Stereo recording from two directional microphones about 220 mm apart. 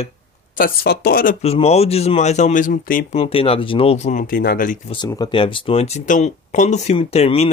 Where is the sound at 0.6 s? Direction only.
45° left (ahead or behind).